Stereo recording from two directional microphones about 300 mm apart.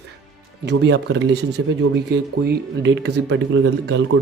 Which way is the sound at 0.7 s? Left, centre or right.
Right.